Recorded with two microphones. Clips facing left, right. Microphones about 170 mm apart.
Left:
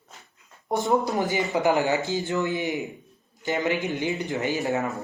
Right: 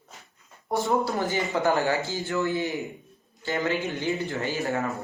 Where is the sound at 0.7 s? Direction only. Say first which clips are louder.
Left 2 dB; 20° left (ahead or behind).